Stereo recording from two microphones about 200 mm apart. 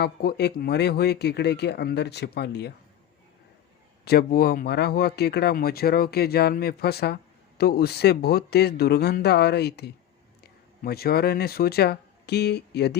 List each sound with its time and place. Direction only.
0.0 s speech: 50° left (ahead or behind)
4.0 s speech: 50° left (ahead or behind)